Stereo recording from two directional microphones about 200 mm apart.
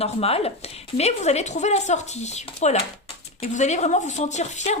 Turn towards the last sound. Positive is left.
turn(degrees=35)  # may be behind; listen again after turning